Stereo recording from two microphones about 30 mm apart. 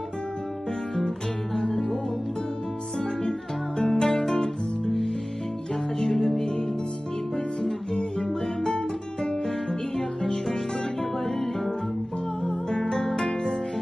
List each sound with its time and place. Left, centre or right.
0.9 s music: centre
3.3 s music: centre
5.9 s music: centre
12.4 s music: left